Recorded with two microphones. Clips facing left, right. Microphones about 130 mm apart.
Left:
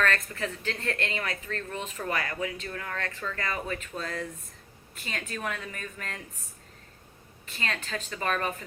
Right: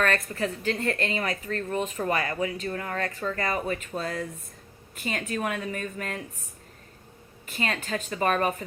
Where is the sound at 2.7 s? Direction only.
25° right (ahead or behind).